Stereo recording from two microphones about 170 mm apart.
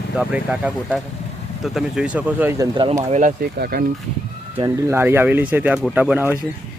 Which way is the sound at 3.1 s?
45° right (ahead or behind).